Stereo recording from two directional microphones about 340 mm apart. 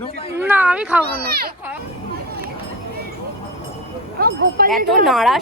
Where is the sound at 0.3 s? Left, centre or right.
Centre.